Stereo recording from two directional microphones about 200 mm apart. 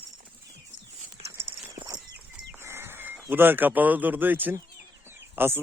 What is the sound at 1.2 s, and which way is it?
Clip-clop, 15° right (ahead or behind).